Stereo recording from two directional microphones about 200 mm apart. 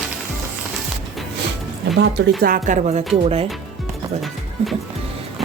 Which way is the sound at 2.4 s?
40° right (ahead or behind).